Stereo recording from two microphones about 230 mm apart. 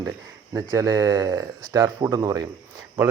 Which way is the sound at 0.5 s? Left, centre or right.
Centre.